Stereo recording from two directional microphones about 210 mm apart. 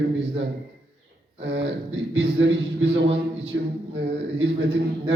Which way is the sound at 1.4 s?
60° right (ahead or behind).